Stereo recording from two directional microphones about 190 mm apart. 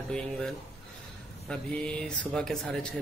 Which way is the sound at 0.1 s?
5° left (ahead or behind).